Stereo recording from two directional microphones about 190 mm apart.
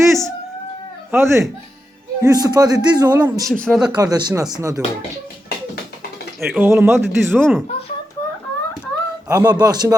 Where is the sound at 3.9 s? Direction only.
20° right (ahead or behind).